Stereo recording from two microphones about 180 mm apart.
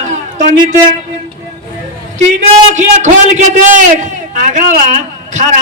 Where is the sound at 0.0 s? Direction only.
40° right (ahead or behind).